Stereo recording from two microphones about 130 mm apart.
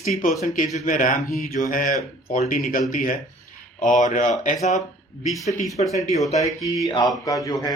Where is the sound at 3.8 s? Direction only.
75° left (ahead or behind).